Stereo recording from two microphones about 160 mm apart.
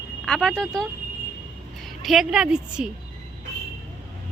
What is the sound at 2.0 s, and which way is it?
Speech, centre (ahead or behind).